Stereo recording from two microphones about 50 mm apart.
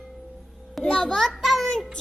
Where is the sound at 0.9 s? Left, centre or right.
Centre.